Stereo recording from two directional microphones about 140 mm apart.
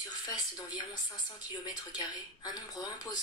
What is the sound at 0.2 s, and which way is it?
Speech, 25° left (ahead or behind).